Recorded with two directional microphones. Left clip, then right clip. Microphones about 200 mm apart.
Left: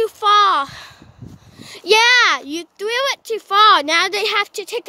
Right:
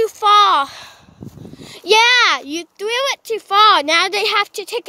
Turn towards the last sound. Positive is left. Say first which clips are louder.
# right 2 dB
turn(degrees=-5)  # may be behind; listen again after turning